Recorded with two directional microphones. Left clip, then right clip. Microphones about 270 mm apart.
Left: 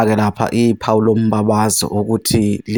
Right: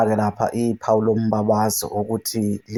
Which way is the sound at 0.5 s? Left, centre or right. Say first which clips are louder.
Left 5 dB; left.